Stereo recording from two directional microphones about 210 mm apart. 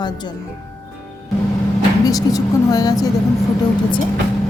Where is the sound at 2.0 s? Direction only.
15° left (ahead or behind).